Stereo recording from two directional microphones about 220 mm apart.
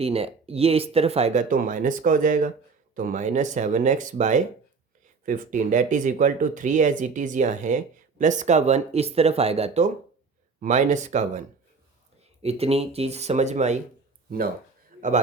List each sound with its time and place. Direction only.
0.0 s speech: 25° right (ahead or behind)
14.3 s speech: 40° right (ahead or behind)